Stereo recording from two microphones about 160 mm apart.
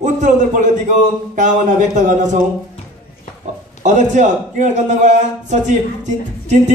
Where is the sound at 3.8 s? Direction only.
50° right (ahead or behind).